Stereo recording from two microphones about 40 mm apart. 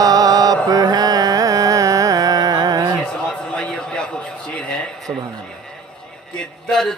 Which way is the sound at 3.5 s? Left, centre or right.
Left.